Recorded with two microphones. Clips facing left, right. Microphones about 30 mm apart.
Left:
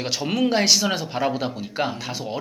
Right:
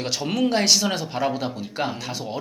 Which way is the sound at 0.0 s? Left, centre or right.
Centre.